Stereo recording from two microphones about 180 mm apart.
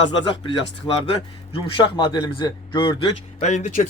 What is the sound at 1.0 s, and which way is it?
A man's voice, 30° left (ahead or behind).